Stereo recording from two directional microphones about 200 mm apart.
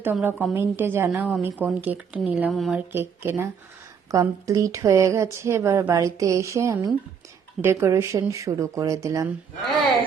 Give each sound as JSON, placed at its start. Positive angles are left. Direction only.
{"t": 0.0, "sound": "speech", "side_deg": -10}
{"t": 2.9, "sound": "speech", "side_deg": -10}